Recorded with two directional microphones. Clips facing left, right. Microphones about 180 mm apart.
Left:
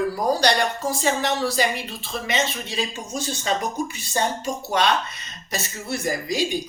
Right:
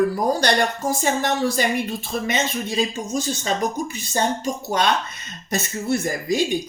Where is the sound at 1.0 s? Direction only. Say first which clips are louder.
Right 1 dB; 50° right (ahead or behind).